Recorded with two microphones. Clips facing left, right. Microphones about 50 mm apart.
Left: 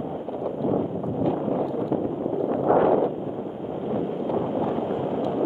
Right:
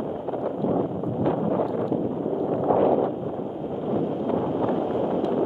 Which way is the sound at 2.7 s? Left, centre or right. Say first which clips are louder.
Left 2 dB; left.